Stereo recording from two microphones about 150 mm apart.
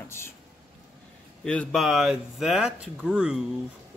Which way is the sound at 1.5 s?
5° left (ahead or behind).